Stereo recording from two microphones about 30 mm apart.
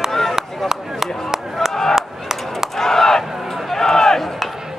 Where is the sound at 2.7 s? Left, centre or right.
Centre.